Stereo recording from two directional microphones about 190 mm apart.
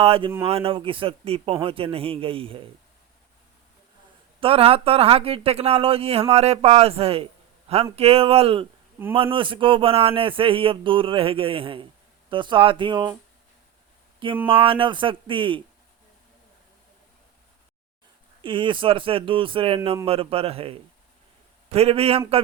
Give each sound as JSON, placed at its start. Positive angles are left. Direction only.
{"t": 0.0, "sound": "speech", "side_deg": -30}
{"t": 4.4, "sound": "speech", "side_deg": -30}
{"t": 14.4, "sound": "speech", "side_deg": -30}
{"t": 18.4, "sound": "speech", "side_deg": -25}